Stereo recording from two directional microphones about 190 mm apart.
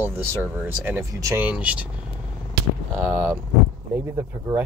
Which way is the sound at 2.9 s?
5° right (ahead or behind).